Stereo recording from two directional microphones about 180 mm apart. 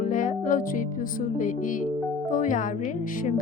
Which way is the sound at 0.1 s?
45° left (ahead or behind).